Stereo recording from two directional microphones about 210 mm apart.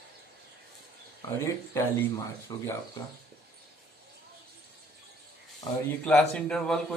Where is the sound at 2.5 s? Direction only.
20° left (ahead or behind).